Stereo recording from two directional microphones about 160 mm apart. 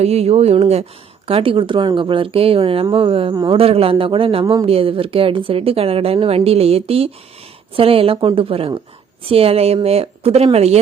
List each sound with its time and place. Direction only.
0.0 s a man's voice: 40° right (ahead or behind); by 3.6 s 25° right (ahead or behind)
3.6 s speech: 35° right (ahead or behind)